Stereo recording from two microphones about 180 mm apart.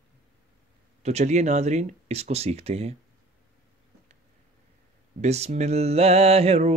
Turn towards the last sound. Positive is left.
turn(degrees=-35)  # may be behind; listen again after turning